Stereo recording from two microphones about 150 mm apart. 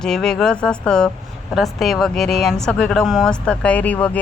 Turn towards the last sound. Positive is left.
turn(degrees=10)  # may be behind; listen again after turning